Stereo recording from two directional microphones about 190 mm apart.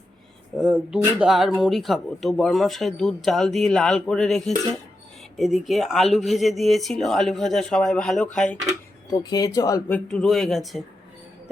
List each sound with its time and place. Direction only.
0.5 s speech: 5° right (ahead or behind)
9.0 s speech: 20° left (ahead or behind)
10.1 s speech: centre (ahead or behind)